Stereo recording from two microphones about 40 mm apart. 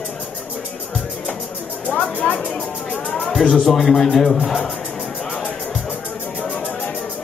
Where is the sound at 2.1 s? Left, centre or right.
Left.